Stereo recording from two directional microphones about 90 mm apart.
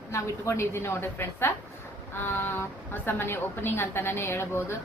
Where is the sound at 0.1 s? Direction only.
30° left (ahead or behind).